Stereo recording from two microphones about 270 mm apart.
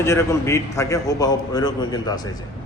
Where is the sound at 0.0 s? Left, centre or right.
Centre.